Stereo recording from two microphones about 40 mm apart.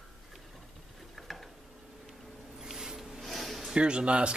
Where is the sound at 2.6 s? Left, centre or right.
Centre.